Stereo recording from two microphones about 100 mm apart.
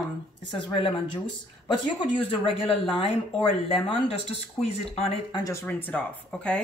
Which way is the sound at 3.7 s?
80° left.